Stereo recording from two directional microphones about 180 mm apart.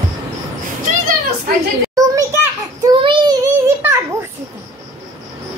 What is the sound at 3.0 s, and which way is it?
Child singing, 25° right (ahead or behind).